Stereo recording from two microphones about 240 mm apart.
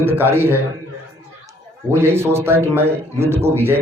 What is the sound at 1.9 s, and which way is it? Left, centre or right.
A man's voice, centre.